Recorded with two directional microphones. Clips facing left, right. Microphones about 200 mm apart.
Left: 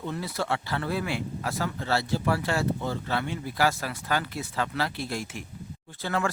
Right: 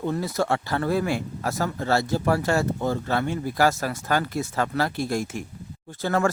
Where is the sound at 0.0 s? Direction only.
45° right (ahead or behind).